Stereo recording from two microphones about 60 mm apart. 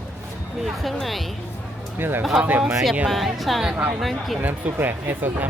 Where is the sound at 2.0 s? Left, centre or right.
Right.